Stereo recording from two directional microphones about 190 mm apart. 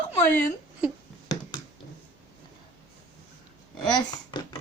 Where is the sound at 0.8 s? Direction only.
5° right (ahead or behind).